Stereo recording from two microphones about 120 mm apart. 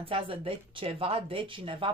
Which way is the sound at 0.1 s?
50° right (ahead or behind).